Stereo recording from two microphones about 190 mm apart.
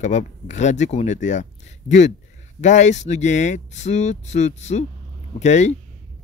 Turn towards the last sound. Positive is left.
turn(degrees=35)  # may be behind; listen again after turning